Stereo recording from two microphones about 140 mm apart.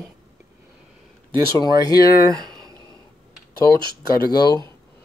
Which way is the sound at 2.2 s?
30° right (ahead or behind).